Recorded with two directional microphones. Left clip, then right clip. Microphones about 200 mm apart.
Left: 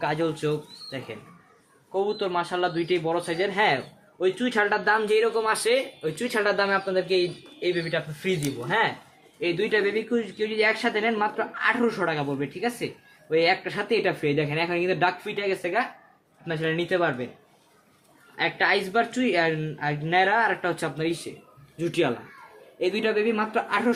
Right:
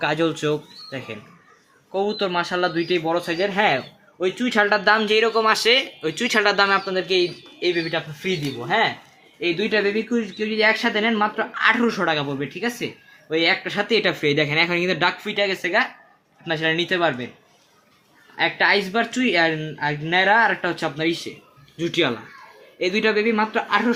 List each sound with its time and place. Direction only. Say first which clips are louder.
0.0 s speech: right 5 dB; 35° right (ahead or behind)
18.3 s speech: right 5 dB; 40° right (ahead or behind)